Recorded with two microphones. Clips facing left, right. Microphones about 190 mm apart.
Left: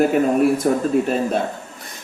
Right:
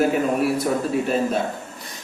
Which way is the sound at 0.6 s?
45° left (ahead or behind).